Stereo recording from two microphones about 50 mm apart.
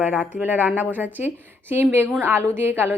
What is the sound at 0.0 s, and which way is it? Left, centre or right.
Speech, right.